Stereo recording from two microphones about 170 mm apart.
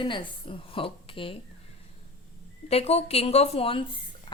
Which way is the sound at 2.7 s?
35° left (ahead or behind).